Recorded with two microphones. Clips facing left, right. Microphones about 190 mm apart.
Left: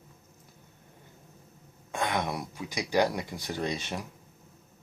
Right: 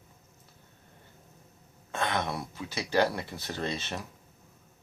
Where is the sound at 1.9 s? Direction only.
15° left (ahead or behind).